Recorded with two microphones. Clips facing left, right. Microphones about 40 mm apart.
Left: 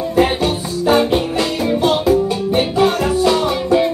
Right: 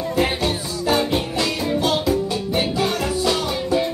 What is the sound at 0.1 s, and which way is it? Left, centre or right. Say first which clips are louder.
Music: left 6 dB; left.